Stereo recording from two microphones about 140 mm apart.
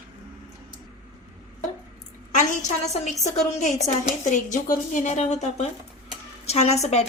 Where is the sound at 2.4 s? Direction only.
55° left (ahead or behind).